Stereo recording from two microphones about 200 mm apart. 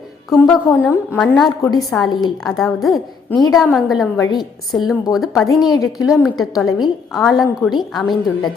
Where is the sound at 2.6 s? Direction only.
Centre (ahead or behind).